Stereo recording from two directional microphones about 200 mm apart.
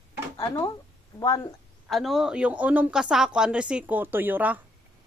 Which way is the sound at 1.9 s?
Centre (ahead or behind).